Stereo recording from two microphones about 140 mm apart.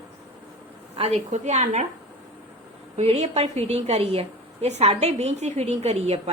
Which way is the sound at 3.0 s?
50° right (ahead or behind).